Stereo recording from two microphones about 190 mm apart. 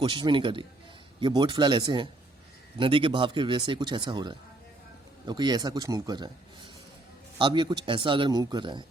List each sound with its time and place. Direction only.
0.0 s speech: 25° right (ahead or behind)
7.3 s speech: 25° right (ahead or behind)